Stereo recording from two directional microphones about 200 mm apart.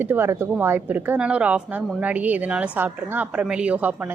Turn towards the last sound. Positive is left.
turn(degrees=-10)  # may be behind; listen again after turning